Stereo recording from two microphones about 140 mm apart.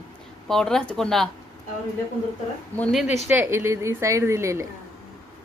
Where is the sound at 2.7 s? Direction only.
10° left (ahead or behind).